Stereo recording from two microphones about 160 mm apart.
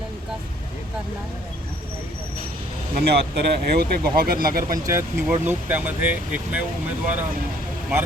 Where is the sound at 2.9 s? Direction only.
85° right.